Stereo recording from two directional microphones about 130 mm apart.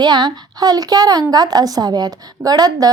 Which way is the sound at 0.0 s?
35° right (ahead or behind).